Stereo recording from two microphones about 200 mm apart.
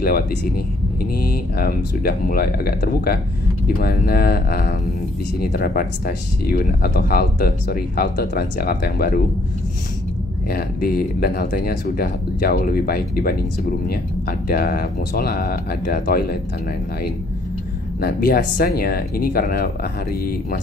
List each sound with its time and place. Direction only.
1.1 s speech: 50° left (ahead or behind)
10.5 s speech: 50° left (ahead or behind)
18.0 s speech: 50° left (ahead or behind)